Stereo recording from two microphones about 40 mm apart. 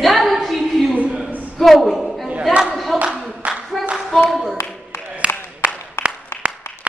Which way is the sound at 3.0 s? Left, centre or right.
Right.